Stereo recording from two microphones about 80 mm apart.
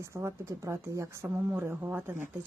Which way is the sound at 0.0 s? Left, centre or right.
Right.